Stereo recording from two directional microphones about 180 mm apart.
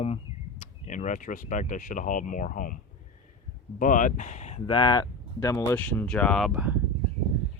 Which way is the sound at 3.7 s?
45° left (ahead or behind).